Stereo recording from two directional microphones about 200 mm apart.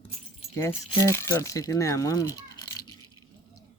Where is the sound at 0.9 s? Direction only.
15° left (ahead or behind).